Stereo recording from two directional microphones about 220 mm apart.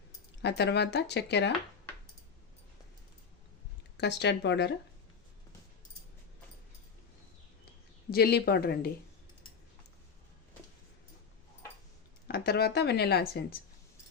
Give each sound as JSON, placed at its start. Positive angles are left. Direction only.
{"t": 0.4, "sound": "speech", "side_deg": 50}
{"t": 3.9, "sound": "speech", "side_deg": 50}
{"t": 8.1, "sound": "speech", "side_deg": 45}
{"t": 12.3, "sound": "speech", "side_deg": 45}